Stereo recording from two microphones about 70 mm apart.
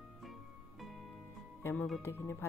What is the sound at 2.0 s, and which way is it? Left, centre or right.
Speech, left.